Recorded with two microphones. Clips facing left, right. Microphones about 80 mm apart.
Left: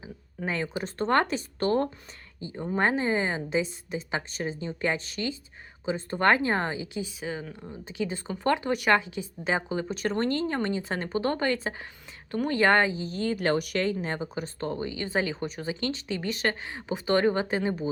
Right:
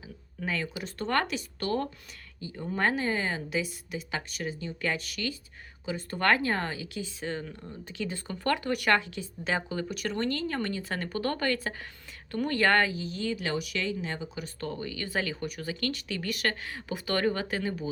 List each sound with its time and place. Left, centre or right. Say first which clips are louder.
0.3 s speech: left 3 dB; left
7.2 s speech: left 1 dB; centre
13.1 s speech: left 5 dB; left
14.6 s speech: left 3 dB; left